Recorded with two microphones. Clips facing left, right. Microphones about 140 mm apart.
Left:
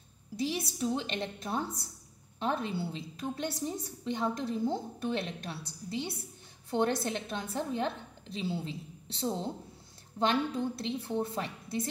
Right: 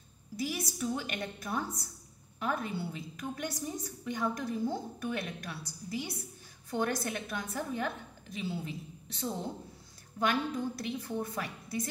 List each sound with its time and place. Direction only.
0.4 s a woman's voice: 30° left (ahead or behind)